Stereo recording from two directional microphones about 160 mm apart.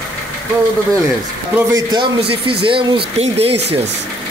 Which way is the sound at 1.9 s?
30° right (ahead or behind).